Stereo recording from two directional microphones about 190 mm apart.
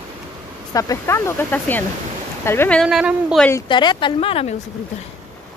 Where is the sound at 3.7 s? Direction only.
25° left (ahead or behind).